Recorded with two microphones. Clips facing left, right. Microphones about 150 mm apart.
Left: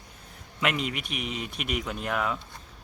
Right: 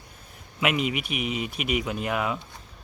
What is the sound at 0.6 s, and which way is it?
Speech, 5° right (ahead or behind).